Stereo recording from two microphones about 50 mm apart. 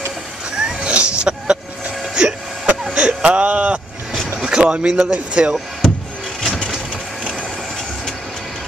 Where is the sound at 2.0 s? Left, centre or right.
Centre.